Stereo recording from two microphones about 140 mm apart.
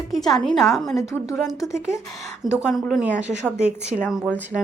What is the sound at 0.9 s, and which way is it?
Speech, 20° left (ahead or behind).